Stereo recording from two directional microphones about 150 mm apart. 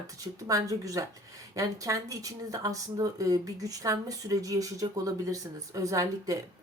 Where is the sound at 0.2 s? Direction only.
25° right (ahead or behind).